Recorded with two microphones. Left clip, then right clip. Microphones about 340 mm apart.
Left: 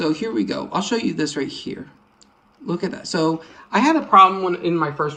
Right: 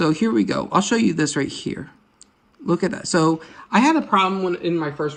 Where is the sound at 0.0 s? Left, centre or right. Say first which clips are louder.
Right 2 dB; centre.